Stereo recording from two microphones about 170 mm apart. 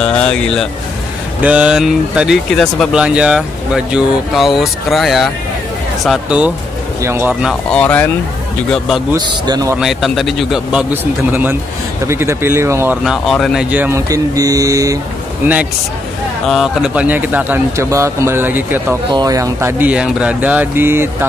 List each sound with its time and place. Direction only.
0.0 s speech: 5° left (ahead or behind)
1.4 s speech: 5° right (ahead or behind)
7.7 s speech: 10° left (ahead or behind)
9.1 s a man's voice: 20° right (ahead or behind)
9.8 s speech: centre (ahead or behind); by 15.0 s 20° right (ahead or behind)
16.4 s speech: centre (ahead or behind)